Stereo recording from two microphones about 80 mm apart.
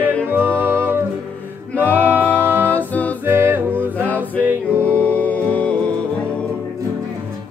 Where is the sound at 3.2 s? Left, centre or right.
Right.